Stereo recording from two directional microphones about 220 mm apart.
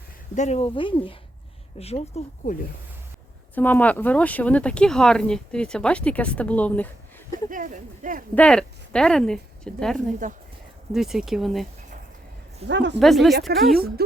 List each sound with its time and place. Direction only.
0.3 s speech: 30° left (ahead or behind)
3.5 s speech: 10° left (ahead or behind)
7.5 s speech: 35° right (ahead or behind)
8.4 s speech: 5° left (ahead or behind)
10.2 s speech: 35° right (ahead or behind)
10.9 s speech: centre (ahead or behind)
12.6 s speech: 55° right (ahead or behind)
13.0 s speech: centre (ahead or behind)
13.7 s speech: 45° right (ahead or behind)